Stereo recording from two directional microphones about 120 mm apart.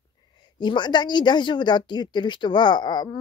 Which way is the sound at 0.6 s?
40° left (ahead or behind).